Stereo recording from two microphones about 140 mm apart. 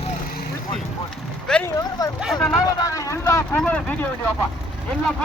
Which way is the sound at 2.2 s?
5° left (ahead or behind).